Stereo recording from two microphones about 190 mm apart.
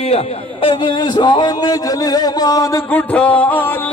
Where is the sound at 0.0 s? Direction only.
30° left (ahead or behind).